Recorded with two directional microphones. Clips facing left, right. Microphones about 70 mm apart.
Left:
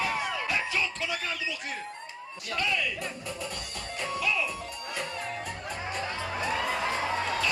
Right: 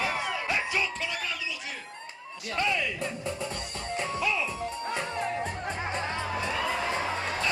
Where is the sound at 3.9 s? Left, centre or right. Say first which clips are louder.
Right 1 dB; right.